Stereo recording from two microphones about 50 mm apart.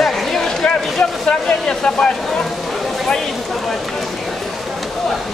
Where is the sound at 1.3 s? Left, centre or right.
Centre.